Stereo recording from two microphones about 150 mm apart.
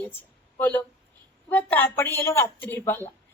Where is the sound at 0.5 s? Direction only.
10° left (ahead or behind).